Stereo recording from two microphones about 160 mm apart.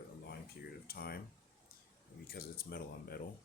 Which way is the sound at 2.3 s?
70° left (ahead or behind).